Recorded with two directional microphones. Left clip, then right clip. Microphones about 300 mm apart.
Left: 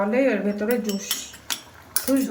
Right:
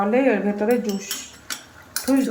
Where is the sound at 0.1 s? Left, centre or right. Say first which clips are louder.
Right 2 dB; centre.